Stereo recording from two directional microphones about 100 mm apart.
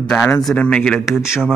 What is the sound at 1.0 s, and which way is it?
Speech, 5° right (ahead or behind).